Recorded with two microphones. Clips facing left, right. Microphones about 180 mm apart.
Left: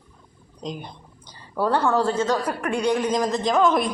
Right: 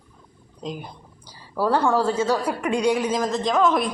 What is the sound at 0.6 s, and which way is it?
Speech, 5° right (ahead or behind).